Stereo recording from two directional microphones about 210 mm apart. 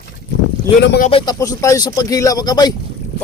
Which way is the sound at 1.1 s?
20° left (ahead or behind).